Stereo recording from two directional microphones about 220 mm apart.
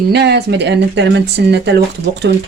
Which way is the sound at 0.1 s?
50° right (ahead or behind).